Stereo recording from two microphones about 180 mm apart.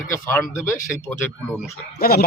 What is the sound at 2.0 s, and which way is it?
Speech, 55° left (ahead or behind).